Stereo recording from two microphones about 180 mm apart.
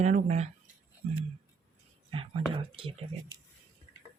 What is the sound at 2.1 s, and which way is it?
Whispering, 30° right (ahead or behind).